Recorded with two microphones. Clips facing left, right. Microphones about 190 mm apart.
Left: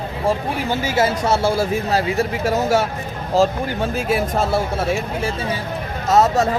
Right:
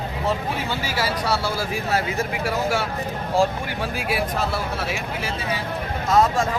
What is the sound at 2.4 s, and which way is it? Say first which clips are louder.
Speech: left 6 dB; 40° left (ahead or behind).